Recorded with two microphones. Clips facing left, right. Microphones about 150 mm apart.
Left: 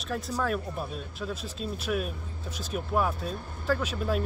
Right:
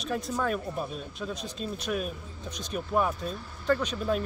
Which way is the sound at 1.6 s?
Centre (ahead or behind).